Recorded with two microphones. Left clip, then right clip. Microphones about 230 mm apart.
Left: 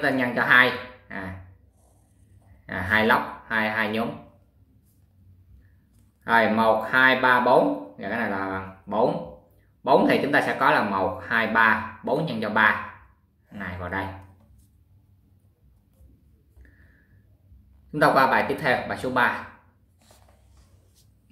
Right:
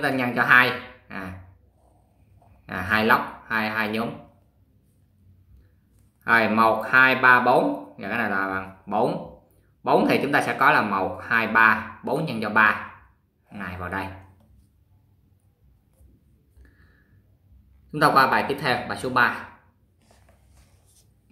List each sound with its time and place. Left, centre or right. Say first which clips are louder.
0.0 s speech: even; centre
2.7 s speech: even; centre
6.2 s speech: right 1 dB; centre
17.9 s speech: right 1 dB; centre